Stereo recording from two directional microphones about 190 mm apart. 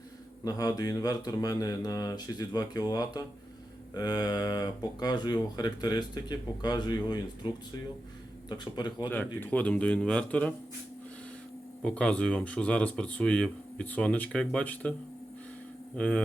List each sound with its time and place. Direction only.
0.4 s speech: 20° left (ahead or behind)
9.0 s speech: 10° left (ahead or behind)
11.8 s speech: 5° left (ahead or behind)
16.0 s speech: 5° left (ahead or behind)